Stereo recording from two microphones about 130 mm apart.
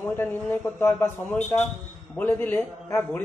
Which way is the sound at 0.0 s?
15° left (ahead or behind).